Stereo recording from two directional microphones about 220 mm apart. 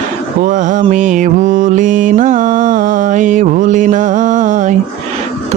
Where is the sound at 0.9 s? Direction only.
35° right (ahead or behind).